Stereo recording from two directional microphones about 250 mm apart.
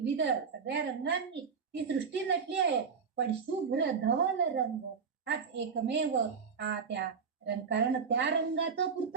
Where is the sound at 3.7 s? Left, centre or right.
Right.